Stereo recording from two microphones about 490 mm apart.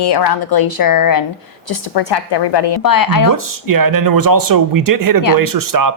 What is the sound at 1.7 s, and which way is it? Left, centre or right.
A woman's voice, left.